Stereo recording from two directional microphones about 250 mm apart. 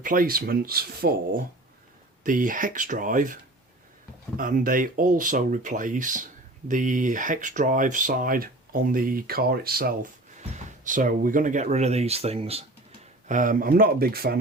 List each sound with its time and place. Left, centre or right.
0.0 s speech: right
4.4 s speech: right